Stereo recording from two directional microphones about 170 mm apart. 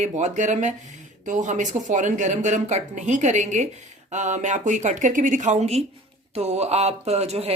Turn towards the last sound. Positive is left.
turn(degrees=-40)  # may be behind; listen again after turning